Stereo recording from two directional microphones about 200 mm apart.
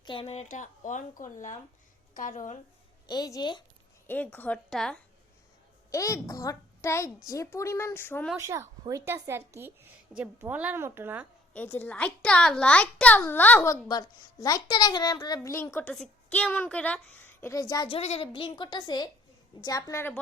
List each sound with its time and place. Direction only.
0.0 s a woman's voice: 25° left (ahead or behind)
3.1 s a child's voice: 20° left (ahead or behind); by 4.9 s 5° left (ahead or behind)
5.9 s a child's voice: 15° left (ahead or behind)
8.4 s a woman's voice: 15° right (ahead or behind)
11.5 s a child's voice: 10° left (ahead or behind)
13.8 s a child's voice: 20° left (ahead or behind)